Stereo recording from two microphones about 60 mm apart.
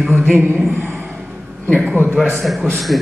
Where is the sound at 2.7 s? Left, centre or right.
Centre.